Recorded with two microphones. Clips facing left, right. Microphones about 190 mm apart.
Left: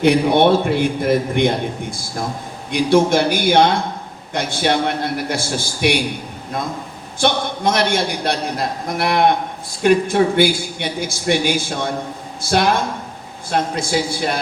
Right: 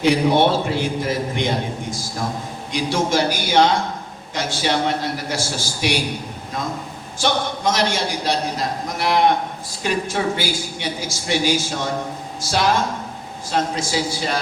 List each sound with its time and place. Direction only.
0.0 s speech: 60° left (ahead or behind)
7.2 s speech: 60° left (ahead or behind)